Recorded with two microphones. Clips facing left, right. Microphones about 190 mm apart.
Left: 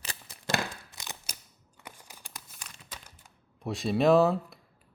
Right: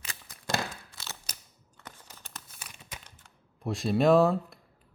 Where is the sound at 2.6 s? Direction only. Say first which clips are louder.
Right 2 dB; 10° right (ahead or behind).